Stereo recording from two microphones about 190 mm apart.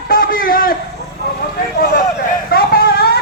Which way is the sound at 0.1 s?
45° left (ahead or behind).